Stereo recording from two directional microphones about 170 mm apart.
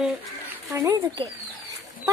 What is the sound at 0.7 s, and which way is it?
Speech, 20° right (ahead or behind).